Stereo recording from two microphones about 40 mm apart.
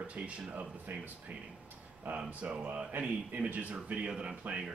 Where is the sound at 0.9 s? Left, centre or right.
Right.